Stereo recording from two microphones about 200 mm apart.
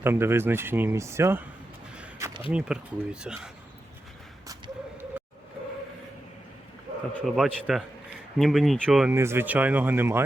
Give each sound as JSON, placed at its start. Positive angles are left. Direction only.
{"t": 0.0, "sound": "speech", "side_deg": -10}
{"t": 2.0, "sound": "a sound", "side_deg": -15}
{"t": 2.5, "sound": "speech", "side_deg": -5}
{"t": 4.4, "sound": "a sound", "side_deg": -15}
{"t": 7.2, "sound": "speech", "side_deg": -5}
{"t": 9.1, "sound": "speech", "side_deg": -10}